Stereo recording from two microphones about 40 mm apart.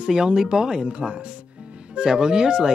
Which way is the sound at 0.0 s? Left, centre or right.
Centre.